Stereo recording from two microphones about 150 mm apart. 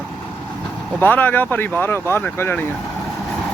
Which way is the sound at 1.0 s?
10° left (ahead or behind).